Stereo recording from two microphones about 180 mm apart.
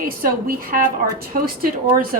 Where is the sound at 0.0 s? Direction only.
50° right (ahead or behind).